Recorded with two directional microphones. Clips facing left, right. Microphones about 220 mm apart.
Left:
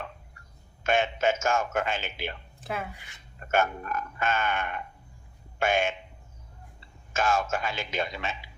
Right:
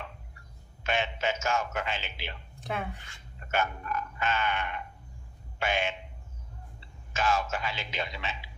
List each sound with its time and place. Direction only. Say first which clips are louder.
0.9 s a man's voice: left 5 dB; 45° left (ahead or behind)
2.6 s speech: right 1 dB; centre (ahead or behind)
3.4 s a man's voice: left 4 dB; 50° left (ahead or behind)